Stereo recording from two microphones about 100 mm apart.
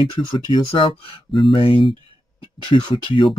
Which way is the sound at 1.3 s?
55° left (ahead or behind).